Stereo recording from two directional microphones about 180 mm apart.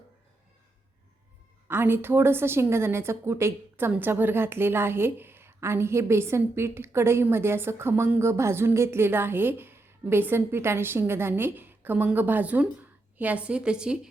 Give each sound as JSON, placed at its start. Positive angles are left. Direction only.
{"t": 1.6, "sound": "a woman's voice", "side_deg": -10}